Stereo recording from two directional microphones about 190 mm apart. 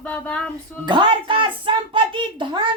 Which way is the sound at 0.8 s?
25° right (ahead or behind).